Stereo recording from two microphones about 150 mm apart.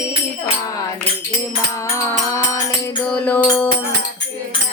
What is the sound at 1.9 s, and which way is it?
Music, 20° left (ahead or behind).